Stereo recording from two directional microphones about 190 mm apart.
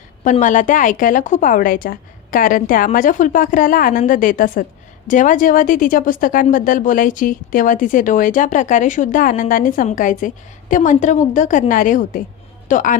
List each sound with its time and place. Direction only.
0.3 s a woman's voice: 40° left (ahead or behind)